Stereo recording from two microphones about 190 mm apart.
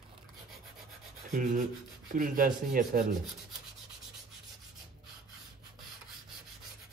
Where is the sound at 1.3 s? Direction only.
40° right (ahead or behind).